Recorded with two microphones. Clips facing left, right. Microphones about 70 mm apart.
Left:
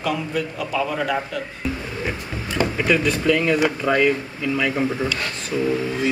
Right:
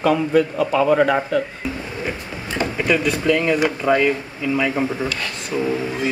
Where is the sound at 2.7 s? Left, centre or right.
Centre.